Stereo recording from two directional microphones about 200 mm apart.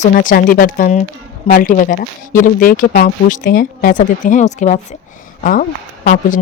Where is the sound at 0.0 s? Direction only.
40° left (ahead or behind).